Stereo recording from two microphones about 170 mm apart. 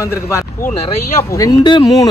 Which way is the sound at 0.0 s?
15° left (ahead or behind).